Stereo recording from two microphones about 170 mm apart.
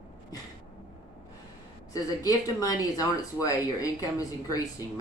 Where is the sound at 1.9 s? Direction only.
20° left (ahead or behind).